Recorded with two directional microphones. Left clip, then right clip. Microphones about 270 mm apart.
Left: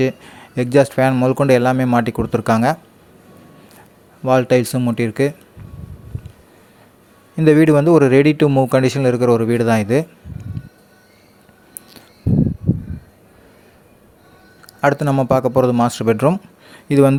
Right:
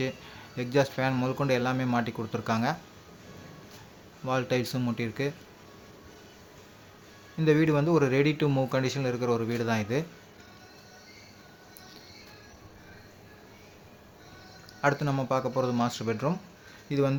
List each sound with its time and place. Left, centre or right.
0.0 s speech: left
4.2 s speech: left
7.3 s speech: left
14.8 s speech: left